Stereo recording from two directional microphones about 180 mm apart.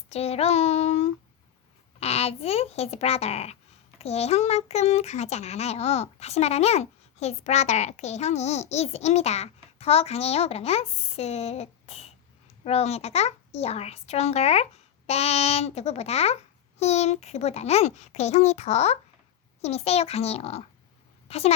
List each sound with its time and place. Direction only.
0.1 s child singing: 35° left (ahead or behind)
2.0 s speech: 35° left (ahead or behind)